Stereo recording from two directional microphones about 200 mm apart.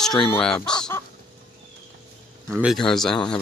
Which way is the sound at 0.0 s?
5° left (ahead or behind).